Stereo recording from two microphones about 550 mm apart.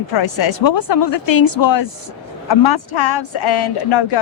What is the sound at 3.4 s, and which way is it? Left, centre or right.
Speech, left.